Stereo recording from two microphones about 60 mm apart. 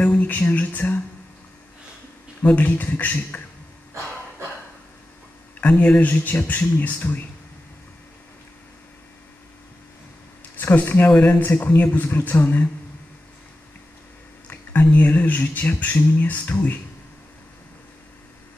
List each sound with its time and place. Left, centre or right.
0.2 s speech: left
2.4 s speech: left
5.6 s speech: left
10.6 s speech: left
14.5 s speech: left